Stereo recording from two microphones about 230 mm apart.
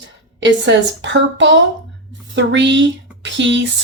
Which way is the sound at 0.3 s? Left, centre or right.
Right.